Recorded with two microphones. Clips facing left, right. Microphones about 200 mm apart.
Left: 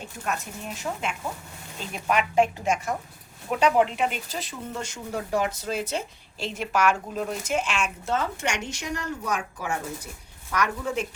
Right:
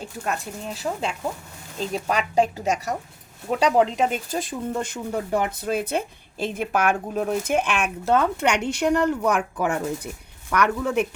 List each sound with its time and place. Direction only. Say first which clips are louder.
0.3 s a woman's voice: right 2 dB; 35° right (ahead or behind); by 11.1 s 60° right (ahead or behind)